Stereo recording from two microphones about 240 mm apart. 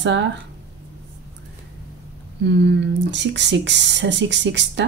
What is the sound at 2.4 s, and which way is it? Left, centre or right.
Speech, right.